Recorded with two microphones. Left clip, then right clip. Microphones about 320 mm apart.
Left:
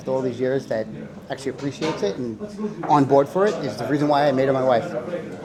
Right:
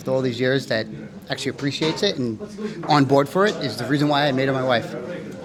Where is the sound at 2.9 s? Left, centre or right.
Right.